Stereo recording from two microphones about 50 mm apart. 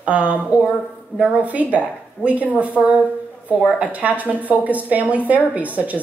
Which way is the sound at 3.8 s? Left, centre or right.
Right.